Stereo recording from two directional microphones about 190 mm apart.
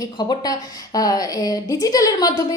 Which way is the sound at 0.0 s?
20° left (ahead or behind).